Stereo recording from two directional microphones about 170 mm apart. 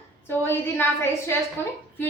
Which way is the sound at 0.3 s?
10° left (ahead or behind).